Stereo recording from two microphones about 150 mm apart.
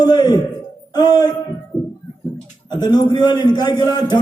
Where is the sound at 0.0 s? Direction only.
25° left (ahead or behind).